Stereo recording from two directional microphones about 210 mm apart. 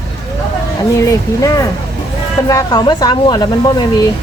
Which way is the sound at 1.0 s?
15° left (ahead or behind).